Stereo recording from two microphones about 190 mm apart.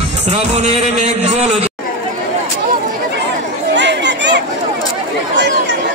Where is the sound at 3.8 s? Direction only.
65° right (ahead or behind).